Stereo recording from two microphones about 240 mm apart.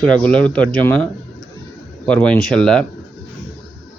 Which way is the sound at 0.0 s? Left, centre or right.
Centre.